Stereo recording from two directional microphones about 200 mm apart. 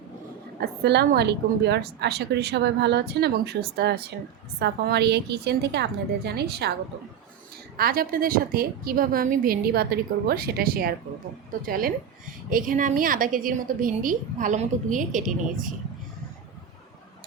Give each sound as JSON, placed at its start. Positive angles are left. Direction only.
{"t": 0.6, "sound": "a woman's voice", "side_deg": -55}
{"t": 7.8, "sound": "a woman's voice", "side_deg": -50}